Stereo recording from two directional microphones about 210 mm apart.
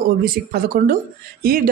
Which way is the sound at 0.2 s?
45° right (ahead or behind).